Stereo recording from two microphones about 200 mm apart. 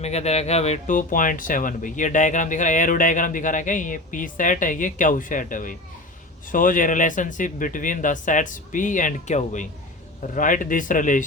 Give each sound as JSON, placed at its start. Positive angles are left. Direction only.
{"t": 0.0, "sound": "speech", "side_deg": 35}